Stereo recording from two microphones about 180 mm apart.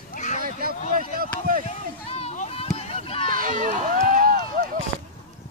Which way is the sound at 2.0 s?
35° left (ahead or behind).